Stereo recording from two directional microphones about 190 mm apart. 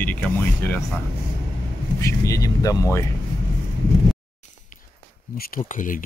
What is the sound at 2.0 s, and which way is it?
Speech, 15° left (ahead or behind).